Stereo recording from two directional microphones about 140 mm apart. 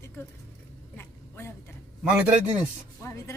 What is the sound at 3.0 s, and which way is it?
Speech, 20° left (ahead or behind).